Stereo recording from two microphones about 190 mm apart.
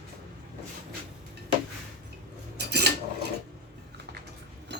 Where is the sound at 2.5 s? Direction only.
60° right (ahead or behind).